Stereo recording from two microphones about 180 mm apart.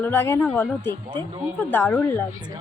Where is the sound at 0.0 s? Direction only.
10° left (ahead or behind).